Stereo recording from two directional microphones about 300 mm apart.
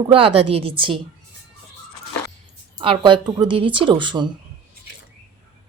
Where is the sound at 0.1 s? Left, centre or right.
Centre.